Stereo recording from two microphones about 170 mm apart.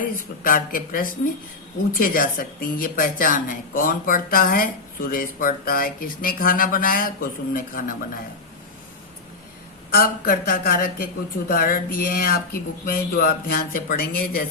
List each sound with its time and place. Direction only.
0.0 s a woman's voice: 55° left (ahead or behind)
9.9 s a woman's voice: 60° left (ahead or behind)